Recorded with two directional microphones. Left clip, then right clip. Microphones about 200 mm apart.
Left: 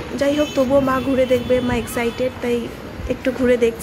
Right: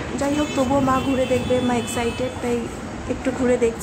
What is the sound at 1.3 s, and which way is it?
Speech, 15° left (ahead or behind).